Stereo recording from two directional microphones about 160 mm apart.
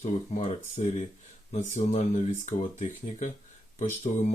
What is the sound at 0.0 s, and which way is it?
Speech, 50° left (ahead or behind).